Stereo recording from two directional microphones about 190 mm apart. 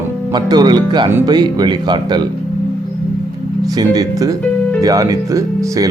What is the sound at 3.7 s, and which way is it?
Speech, 20° right (ahead or behind).